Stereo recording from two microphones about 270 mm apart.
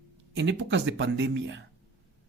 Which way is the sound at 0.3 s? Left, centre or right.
Right.